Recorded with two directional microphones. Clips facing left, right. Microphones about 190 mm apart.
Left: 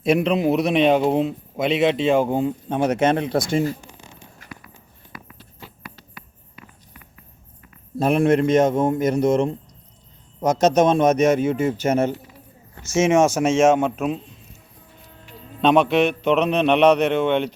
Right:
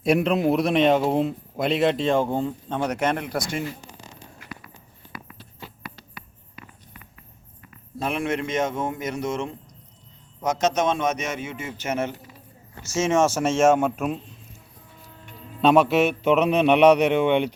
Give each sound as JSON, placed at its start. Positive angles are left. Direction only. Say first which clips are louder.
{"t": 0.0, "sound": "a man's voice", "louder": "left 2 dB", "side_deg": 0}
{"t": 2.2, "sound": "speech", "louder": "left 4 dB", "side_deg": 15}
{"t": 7.9, "sound": "a man's voice", "louder": "left 9 dB", "side_deg": 40}
{"t": 12.8, "sound": "speech", "louder": "left 4 dB", "side_deg": 20}
{"t": 13.8, "sound": "a man's voice", "louder": "left 2 dB", "side_deg": -5}
{"t": 15.6, "sound": "a man's voice", "louder": "left 1 dB", "side_deg": -5}